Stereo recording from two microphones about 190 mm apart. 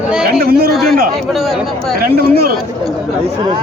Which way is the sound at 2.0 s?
55° right (ahead or behind).